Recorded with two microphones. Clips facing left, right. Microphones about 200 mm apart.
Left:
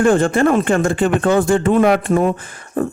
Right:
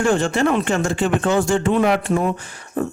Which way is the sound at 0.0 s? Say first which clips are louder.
Left 4 dB; 50° left (ahead or behind).